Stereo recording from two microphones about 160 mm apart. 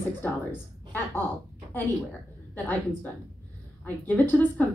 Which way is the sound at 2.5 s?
10° left (ahead or behind).